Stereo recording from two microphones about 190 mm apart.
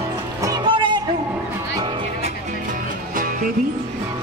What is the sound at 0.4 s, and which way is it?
Music, 20° right (ahead or behind).